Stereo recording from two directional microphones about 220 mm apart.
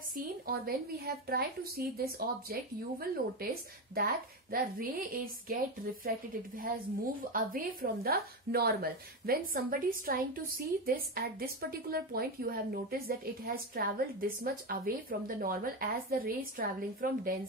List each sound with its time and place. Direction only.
0.1 s a woman's voice: 45° right (ahead or behind)